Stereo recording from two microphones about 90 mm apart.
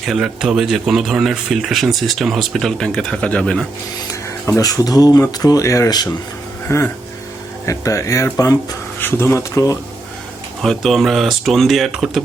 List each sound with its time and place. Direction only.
0.0 s speech: 5° right (ahead or behind)
4.4 s speech: 40° left (ahead or behind)
9.0 s speech: 25° left (ahead or behind)
10.6 s speech: centre (ahead or behind)